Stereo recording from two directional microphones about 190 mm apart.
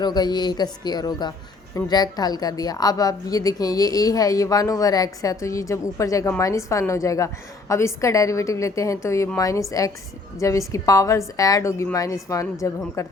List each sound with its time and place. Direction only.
0.0 s a woman's voice: 20° left (ahead or behind)